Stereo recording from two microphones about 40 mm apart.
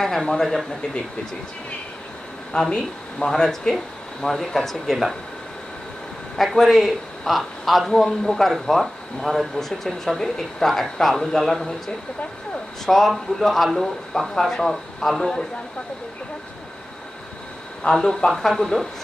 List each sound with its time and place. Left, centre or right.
0.0 s speech: centre
2.7 s speech: centre
6.3 s a man's voice: centre
12.8 s speech: centre
17.9 s speech: centre